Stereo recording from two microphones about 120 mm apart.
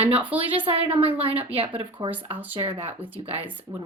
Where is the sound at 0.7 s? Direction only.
50° right (ahead or behind).